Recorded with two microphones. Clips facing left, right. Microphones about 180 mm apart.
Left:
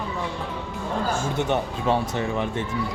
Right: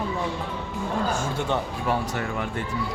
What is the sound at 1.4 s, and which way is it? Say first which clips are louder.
Speech: left 2 dB; 20° left (ahead or behind).